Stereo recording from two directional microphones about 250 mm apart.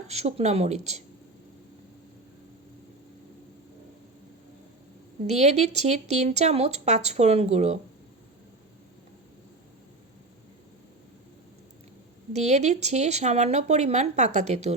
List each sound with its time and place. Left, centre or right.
0.1 s speech: right
5.2 s speech: right
12.3 s speech: right